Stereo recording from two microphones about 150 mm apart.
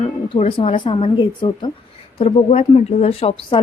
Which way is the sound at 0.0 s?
40° left (ahead or behind).